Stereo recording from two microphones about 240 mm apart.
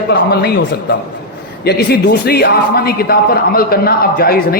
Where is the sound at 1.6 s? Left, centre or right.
Left.